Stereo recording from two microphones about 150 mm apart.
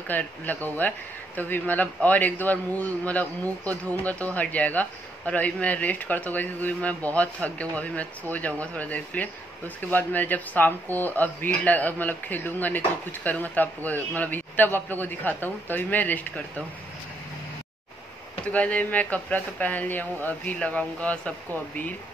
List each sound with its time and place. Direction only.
0.1 s speech: 10° left (ahead or behind)
18.5 s speech: 10° left (ahead or behind)